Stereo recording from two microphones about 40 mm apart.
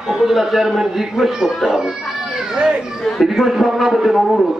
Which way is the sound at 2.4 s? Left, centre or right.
Centre.